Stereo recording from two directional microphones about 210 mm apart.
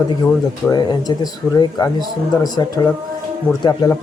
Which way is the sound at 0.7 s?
20° left (ahead or behind).